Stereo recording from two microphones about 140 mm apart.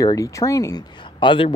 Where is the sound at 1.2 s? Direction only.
35° left (ahead or behind).